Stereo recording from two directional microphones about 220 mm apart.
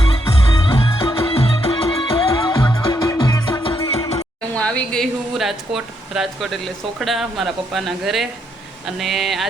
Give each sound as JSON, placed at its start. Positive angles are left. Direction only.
{"t": 0.6, "sound": "music", "side_deg": 25}
{"t": 4.5, "sound": "a sound", "side_deg": 5}
{"t": 7.0, "sound": "speech", "side_deg": 0}